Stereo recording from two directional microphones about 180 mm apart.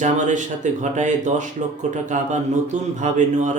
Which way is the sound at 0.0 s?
45° right (ahead or behind).